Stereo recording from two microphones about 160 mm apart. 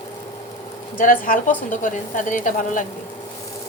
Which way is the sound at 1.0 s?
60° left (ahead or behind).